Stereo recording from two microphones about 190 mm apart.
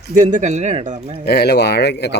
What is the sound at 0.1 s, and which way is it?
Speech, 40° right (ahead or behind).